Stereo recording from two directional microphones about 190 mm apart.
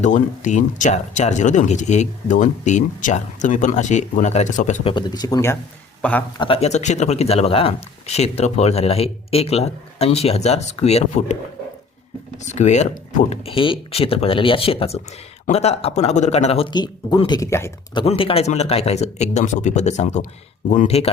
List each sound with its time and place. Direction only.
0.0 s a man's voice: 40° left (ahead or behind); by 6.2 s 10° left (ahead or behind)
6.4 s speech: 30° left (ahead or behind)
12.4 s speech: 35° left (ahead or behind); by 18.0 s 15° left (ahead or behind)
18.0 s speech: 30° left (ahead or behind)